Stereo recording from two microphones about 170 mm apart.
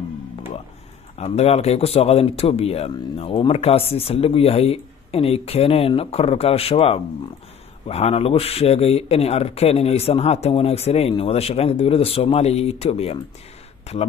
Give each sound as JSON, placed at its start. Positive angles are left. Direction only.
{"t": 1.1, "sound": "speech", "side_deg": 40}